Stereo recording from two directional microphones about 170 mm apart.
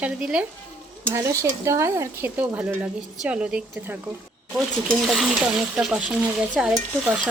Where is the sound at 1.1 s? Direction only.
15° right (ahead or behind).